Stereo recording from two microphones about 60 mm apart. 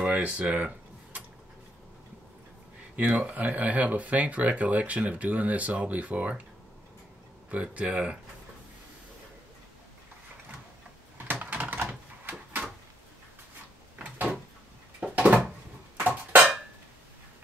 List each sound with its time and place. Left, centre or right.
0.0 s a sound: right
3.0 s speech: right
7.5 s speech: right
11.1 s typing: right
13.9 s door: right
15.1 s a sound: right